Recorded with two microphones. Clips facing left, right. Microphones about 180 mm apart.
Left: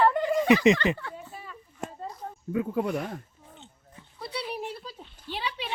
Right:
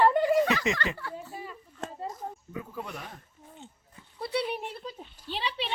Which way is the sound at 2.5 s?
70° left (ahead or behind).